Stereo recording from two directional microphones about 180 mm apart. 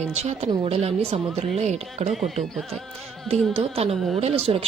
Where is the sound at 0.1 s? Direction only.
35° right (ahead or behind).